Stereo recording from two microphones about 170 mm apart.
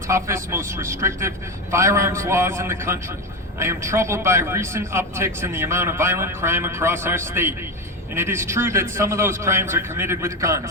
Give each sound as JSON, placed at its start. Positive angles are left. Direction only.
{"t": 0.1, "sound": "a man's voice", "side_deg": -15}